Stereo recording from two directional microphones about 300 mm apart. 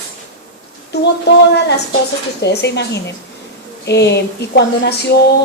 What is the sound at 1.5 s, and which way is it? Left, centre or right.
A woman's voice, left.